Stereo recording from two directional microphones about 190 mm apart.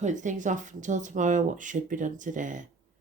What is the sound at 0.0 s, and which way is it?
Speech, 40° right (ahead or behind).